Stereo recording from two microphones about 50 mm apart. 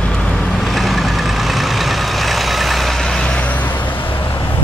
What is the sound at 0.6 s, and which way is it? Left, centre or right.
Vehicle, centre.